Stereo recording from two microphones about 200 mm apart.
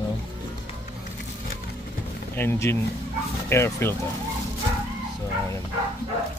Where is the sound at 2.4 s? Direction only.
15° left (ahead or behind).